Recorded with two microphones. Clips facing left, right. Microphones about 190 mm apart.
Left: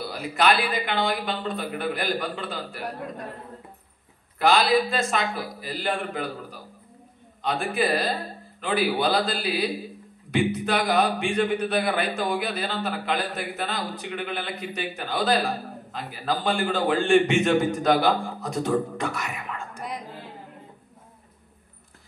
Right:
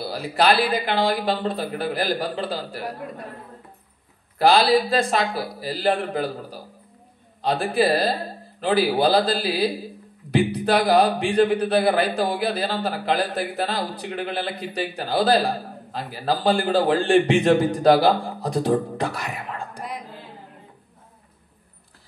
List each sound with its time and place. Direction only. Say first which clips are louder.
0.0 s a man's voice: right 3 dB; 35° right (ahead or behind)
4.4 s a man's voice: right 3 dB; 35° right (ahead or behind)